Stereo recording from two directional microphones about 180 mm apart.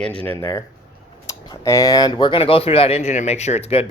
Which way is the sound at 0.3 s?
15° left (ahead or behind).